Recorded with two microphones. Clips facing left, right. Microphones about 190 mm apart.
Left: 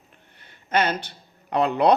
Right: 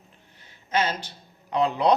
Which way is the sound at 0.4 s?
60° left (ahead or behind).